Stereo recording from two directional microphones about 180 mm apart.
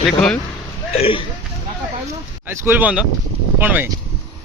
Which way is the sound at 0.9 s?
30° left (ahead or behind).